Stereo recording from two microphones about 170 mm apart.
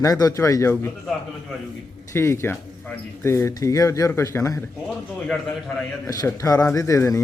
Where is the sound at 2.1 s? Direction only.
15° left (ahead or behind).